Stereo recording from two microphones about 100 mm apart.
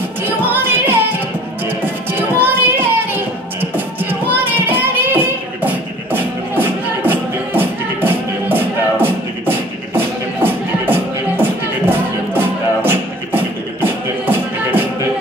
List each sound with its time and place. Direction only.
0.2 s music: 20° right (ahead or behind)
2.1 s child singing: 20° right (ahead or behind)
3.7 s music: 20° right (ahead or behind)